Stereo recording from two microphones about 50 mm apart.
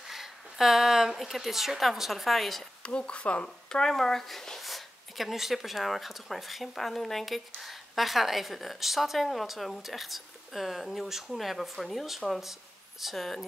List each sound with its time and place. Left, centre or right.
0.1 s speech: centre
2.8 s speech: left
3.4 s a woman's voice: centre